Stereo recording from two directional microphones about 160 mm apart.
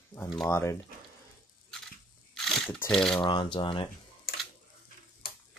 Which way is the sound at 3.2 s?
30° left (ahead or behind).